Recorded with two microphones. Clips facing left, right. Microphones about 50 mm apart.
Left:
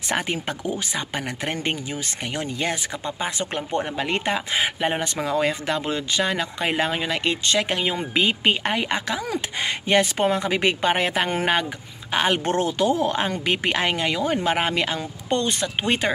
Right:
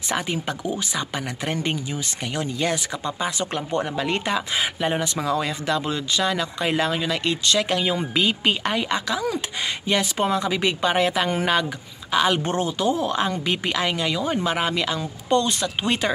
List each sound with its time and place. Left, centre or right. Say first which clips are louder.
0.1 s speech: even; left
12.4 s speech: left 2 dB; left